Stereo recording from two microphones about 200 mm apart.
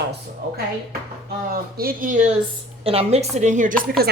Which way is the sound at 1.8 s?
45° right (ahead or behind).